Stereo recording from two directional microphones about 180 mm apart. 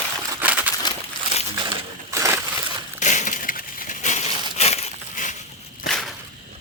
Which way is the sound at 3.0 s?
45° left (ahead or behind).